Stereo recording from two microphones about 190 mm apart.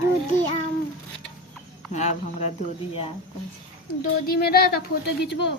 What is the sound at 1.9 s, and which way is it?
Speech, 35° left (ahead or behind).